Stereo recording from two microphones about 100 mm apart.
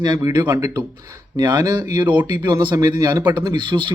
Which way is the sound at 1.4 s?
45° right (ahead or behind).